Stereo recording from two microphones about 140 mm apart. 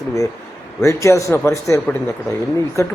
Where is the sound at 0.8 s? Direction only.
20° left (ahead or behind).